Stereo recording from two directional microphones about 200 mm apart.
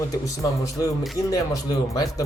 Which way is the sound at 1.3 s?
20° left (ahead or behind).